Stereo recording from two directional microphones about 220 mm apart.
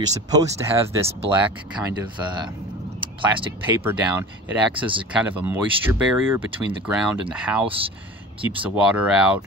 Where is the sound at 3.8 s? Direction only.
10° right (ahead or behind).